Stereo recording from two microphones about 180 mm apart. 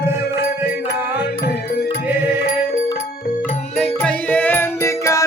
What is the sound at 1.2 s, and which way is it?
Music, 65° left (ahead or behind).